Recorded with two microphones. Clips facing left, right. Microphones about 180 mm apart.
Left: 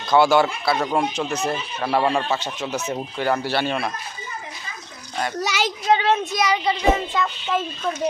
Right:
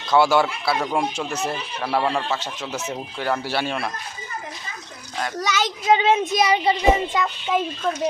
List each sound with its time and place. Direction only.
0.1 s speech: 5° right (ahead or behind)
5.2 s a child's voice: 5° left (ahead or behind)
5.9 s speech: 15° right (ahead or behind)
6.3 s speech: 25° right (ahead or behind)
6.9 s speech: 15° right (ahead or behind)